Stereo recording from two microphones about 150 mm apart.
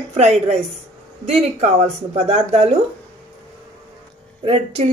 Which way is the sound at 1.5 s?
45° right (ahead or behind).